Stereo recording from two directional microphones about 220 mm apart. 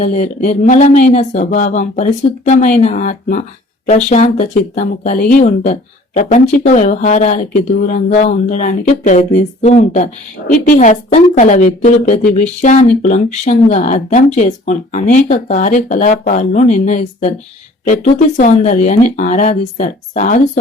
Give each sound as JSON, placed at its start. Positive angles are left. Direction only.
{"t": 0.0, "sound": "speech", "side_deg": 35}